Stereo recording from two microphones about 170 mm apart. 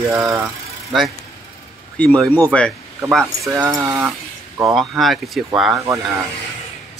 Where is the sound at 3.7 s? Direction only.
15° right (ahead or behind).